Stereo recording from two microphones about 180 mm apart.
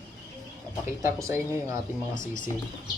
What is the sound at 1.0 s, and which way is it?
Speech, 15° right (ahead or behind).